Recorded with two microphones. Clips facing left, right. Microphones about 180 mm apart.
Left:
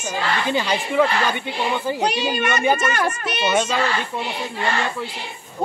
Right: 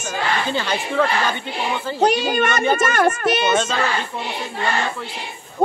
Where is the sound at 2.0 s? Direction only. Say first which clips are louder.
Right 9 dB; 45° right (ahead or behind).